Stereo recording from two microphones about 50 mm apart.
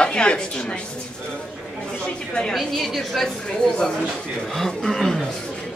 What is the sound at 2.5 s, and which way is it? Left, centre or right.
Speech, centre.